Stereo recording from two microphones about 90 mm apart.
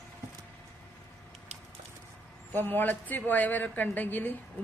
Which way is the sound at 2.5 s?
20° left (ahead or behind).